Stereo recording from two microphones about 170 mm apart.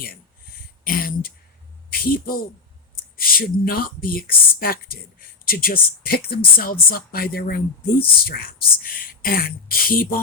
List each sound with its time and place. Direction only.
0.9 s speech: 60° left (ahead or behind)